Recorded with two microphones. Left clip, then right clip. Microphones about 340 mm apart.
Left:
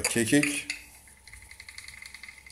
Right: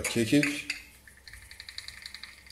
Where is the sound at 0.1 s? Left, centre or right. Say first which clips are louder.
Even; centre.